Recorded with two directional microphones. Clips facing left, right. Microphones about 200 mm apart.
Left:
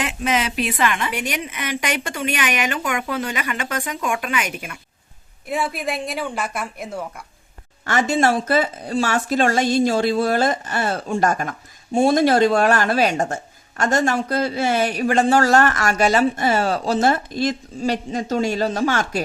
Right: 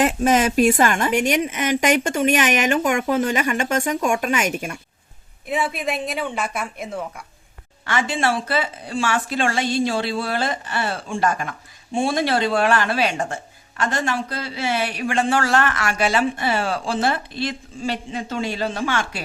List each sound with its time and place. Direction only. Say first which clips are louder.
0.0 s a woman's voice: right 5 dB; 45° right (ahead or behind)
5.5 s speech: even; centre (ahead or behind)
7.9 s a woman's voice: left 4 dB; 45° left (ahead or behind)